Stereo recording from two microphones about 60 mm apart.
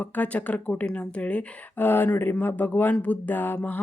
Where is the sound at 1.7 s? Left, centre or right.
Left.